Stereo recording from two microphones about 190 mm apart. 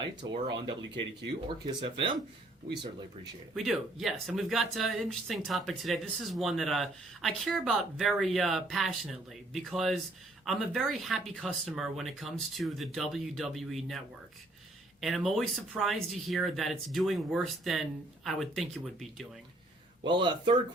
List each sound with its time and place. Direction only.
0.2 s speech: 20° right (ahead or behind)
1.6 s speech: 25° right (ahead or behind)
3.5 s speech: centre (ahead or behind)
15.0 s speech: centre (ahead or behind)
20.1 s speech: 25° right (ahead or behind)